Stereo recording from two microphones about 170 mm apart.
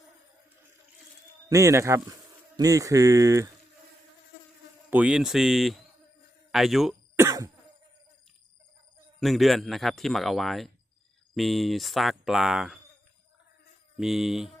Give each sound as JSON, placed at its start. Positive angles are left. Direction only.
{"t": 1.5, "sound": "speech", "side_deg": -20}
{"t": 4.9, "sound": "speech", "side_deg": -10}
{"t": 7.2, "sound": "cough", "side_deg": -20}
{"t": 9.2, "sound": "speech", "side_deg": 0}
{"t": 14.0, "sound": "speech", "side_deg": 0}